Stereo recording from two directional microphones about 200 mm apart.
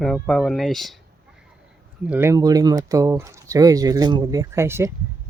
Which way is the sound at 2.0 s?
10° right (ahead or behind).